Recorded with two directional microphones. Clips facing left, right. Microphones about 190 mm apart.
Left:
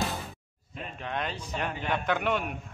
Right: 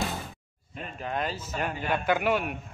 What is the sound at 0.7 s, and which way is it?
A man's voice, 5° right (ahead or behind).